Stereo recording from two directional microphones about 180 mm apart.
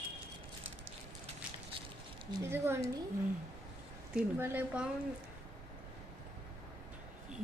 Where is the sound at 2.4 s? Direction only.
15° right (ahead or behind).